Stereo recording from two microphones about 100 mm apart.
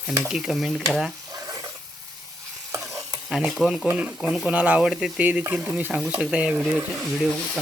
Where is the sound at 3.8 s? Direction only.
15° right (ahead or behind).